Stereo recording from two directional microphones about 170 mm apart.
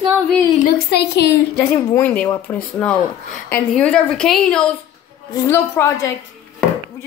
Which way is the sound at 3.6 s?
5° left (ahead or behind).